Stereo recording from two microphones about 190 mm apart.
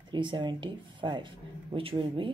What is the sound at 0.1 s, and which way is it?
Speech, 25° right (ahead or behind).